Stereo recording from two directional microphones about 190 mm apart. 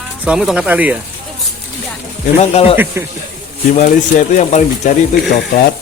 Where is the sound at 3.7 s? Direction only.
40° left (ahead or behind).